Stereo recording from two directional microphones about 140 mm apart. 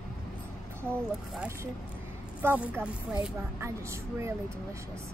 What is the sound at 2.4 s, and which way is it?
Speech, 15° right (ahead or behind).